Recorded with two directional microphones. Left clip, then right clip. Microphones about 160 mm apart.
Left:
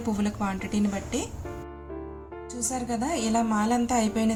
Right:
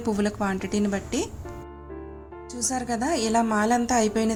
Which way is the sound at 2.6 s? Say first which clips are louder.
Right 3 dB; 35° right (ahead or behind).